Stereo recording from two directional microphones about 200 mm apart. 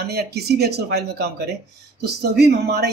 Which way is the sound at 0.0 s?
55° right (ahead or behind).